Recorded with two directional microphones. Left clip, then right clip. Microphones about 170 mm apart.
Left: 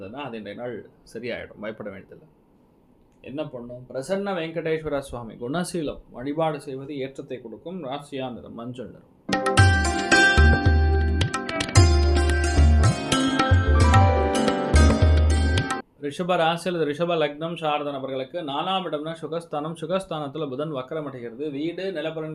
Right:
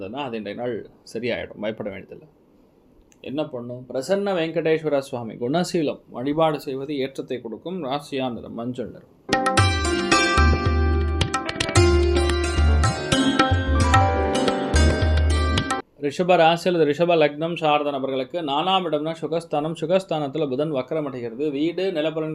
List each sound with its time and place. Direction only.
0.1 s speech: 40° right (ahead or behind)
3.3 s speech: 45° right (ahead or behind)
9.2 s tabla: centre (ahead or behind)
10.0 s music: centre (ahead or behind)
16.0 s speech: 35° right (ahead or behind)